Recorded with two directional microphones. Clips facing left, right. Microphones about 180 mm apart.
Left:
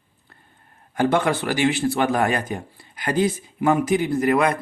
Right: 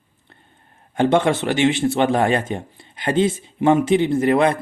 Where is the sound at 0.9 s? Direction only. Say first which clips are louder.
Right 3 dB; 25° right (ahead or behind).